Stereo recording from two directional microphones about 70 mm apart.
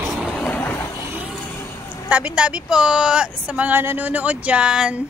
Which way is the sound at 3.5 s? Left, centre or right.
Right.